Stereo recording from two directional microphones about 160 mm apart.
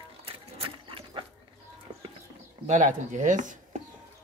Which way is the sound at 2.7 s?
50° right (ahead or behind).